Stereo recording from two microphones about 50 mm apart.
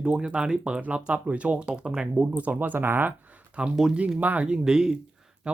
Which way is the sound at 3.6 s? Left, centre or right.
Right.